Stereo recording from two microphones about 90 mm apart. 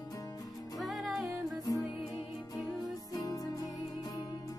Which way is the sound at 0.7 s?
Centre (ahead or behind).